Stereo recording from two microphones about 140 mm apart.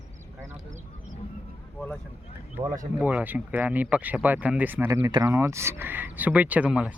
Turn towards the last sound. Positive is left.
turn(degrees=-10)  # may be behind; listen again after turning